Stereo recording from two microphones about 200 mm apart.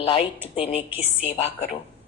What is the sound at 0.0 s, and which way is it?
A man's voice, 25° left (ahead or behind).